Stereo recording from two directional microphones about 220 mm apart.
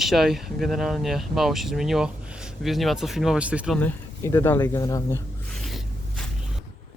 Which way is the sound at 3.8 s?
10° left (ahead or behind).